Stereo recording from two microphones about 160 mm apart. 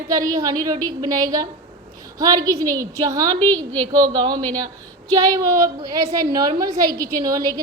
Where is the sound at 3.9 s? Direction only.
25° right (ahead or behind).